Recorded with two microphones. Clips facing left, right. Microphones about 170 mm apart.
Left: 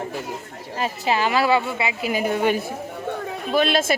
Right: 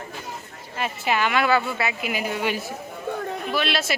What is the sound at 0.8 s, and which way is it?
A woman's voice, 35° left (ahead or behind).